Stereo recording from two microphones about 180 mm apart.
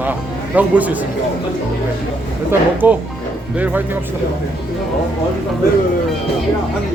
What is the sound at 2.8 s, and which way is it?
Speech, 10° right (ahead or behind).